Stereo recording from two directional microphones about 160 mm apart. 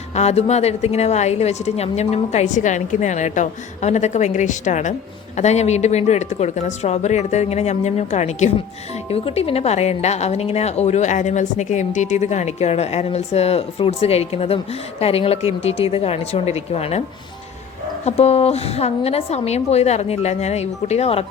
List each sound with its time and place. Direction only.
0.1 s a woman's voice: 45° left (ahead or behind)
18.0 s a woman's voice: 40° left (ahead or behind)